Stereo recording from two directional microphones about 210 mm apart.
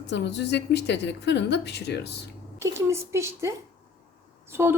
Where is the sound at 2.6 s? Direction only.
15° right (ahead or behind).